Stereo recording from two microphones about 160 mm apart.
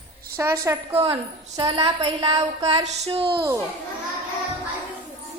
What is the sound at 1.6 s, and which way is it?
Child singing, 35° right (ahead or behind).